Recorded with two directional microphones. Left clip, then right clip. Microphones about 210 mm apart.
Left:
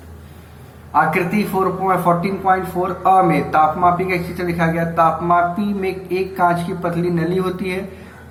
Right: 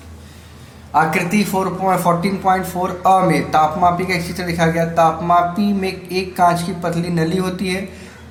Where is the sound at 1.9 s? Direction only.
55° right (ahead or behind).